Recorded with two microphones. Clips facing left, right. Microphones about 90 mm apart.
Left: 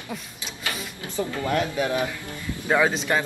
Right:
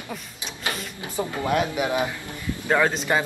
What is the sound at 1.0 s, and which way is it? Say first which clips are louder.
A man's voice: right 1 dB; 15° right (ahead or behind).